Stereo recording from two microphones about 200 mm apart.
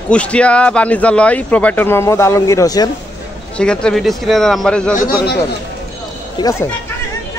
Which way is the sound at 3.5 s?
5° left (ahead or behind).